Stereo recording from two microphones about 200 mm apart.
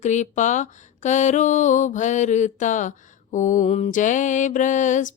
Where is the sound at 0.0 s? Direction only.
35° left (ahead or behind).